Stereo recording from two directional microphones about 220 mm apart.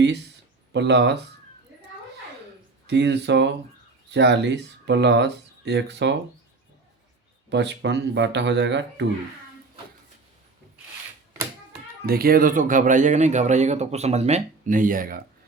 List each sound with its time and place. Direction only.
0.7 s speech: 50° right (ahead or behind)
2.8 s speech: 50° right (ahead or behind)
7.5 s speech: 50° right (ahead or behind)
12.0 s speech: 45° right (ahead or behind)